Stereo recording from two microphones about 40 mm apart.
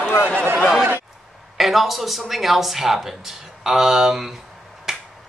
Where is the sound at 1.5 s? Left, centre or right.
Centre.